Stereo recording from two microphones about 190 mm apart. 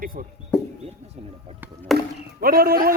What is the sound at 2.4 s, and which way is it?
Speech, 50° right (ahead or behind).